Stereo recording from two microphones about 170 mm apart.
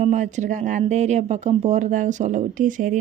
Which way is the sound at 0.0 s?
45° right (ahead or behind).